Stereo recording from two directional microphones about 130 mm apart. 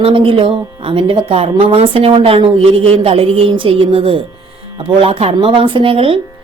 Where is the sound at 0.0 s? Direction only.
45° right (ahead or behind).